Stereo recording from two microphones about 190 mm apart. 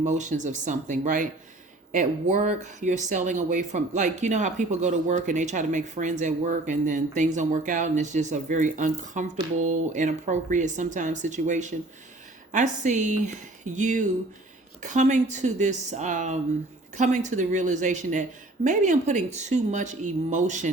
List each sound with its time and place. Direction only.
0.0 s speech: 40° right (ahead or behind)